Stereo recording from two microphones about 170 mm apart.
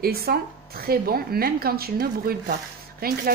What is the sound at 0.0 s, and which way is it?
Speech, 65° right (ahead or behind).